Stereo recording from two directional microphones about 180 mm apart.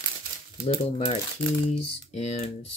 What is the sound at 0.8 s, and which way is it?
Speech, 30° left (ahead or behind).